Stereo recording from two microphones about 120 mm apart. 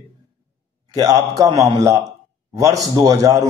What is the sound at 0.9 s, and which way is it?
A man's voice, 25° right (ahead or behind).